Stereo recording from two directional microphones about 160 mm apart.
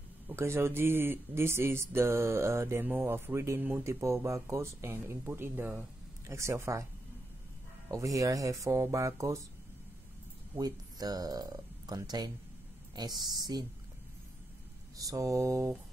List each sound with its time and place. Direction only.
0.3 s speech: 15° right (ahead or behind)
7.9 s speech: 20° right (ahead or behind)
10.5 s speech: 25° right (ahead or behind)
15.0 s speech: 20° right (ahead or behind)